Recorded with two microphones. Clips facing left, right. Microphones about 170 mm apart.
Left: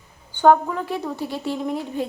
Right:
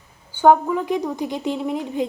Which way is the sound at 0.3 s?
10° right (ahead or behind).